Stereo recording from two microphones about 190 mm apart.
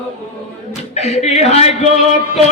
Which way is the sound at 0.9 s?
35° left (ahead or behind).